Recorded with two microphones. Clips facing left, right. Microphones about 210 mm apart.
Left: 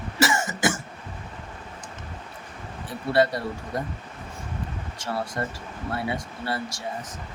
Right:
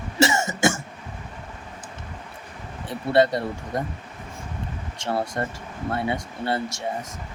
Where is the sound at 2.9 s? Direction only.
25° right (ahead or behind).